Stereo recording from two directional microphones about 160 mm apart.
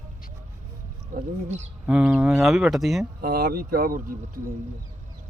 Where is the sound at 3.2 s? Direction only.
75° right (ahead or behind).